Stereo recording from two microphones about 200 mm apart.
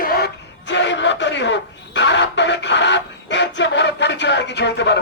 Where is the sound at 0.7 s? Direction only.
65° left (ahead or behind).